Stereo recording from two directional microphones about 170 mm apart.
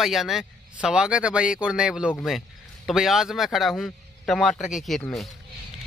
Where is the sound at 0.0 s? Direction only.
Centre (ahead or behind).